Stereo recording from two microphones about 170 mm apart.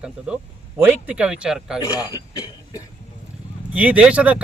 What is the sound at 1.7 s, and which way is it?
A man's voice, 20° left (ahead or behind).